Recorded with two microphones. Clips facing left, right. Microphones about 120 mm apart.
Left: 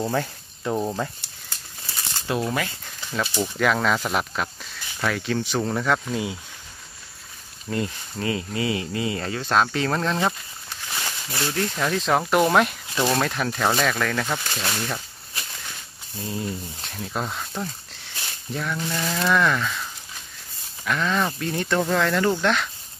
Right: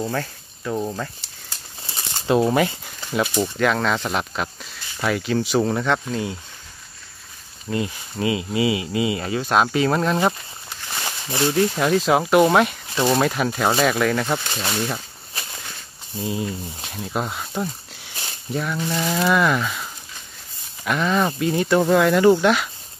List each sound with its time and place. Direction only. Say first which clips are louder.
0.0 s speech: left 1 dB; 15° left (ahead or behind)
1.9 s shuffling cards: right 7 dB; 25° right (ahead or behind)
2.8 s a sound: right 5 dB; 15° right (ahead or behind)
3.5 s speech: even; centre (ahead or behind)
7.7 s speech: right 2 dB; 5° right (ahead or behind)
16.2 s speech: right 4 dB; 10° right (ahead or behind)